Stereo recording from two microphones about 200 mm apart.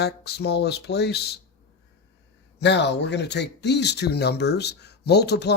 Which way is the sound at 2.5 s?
60° left (ahead or behind).